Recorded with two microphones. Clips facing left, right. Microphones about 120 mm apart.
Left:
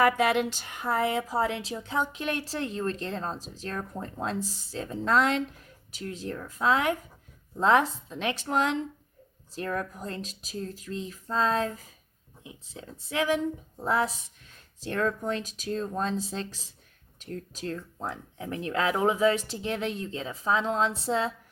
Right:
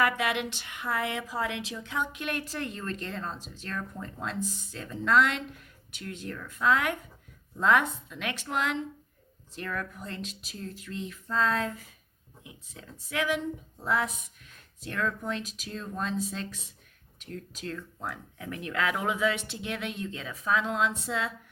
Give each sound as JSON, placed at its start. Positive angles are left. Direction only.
{"t": 0.0, "sound": "a woman's voice", "side_deg": 40}